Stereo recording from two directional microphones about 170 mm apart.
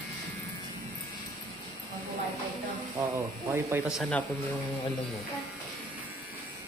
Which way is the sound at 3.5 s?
10° right (ahead or behind).